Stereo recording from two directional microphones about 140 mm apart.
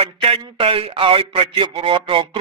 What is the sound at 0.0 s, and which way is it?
A man's voice, 45° right (ahead or behind).